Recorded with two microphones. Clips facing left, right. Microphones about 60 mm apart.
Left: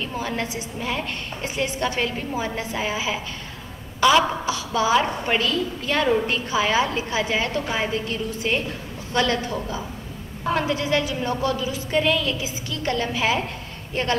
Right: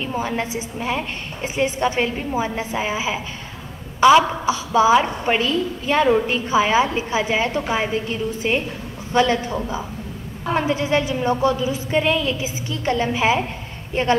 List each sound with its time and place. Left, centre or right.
0.3 s a woman's voice: right